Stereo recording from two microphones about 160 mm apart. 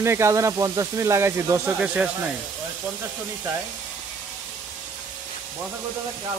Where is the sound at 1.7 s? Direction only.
5° right (ahead or behind).